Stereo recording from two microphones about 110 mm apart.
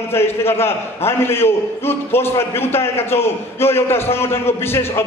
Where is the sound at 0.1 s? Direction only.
20° left (ahead or behind).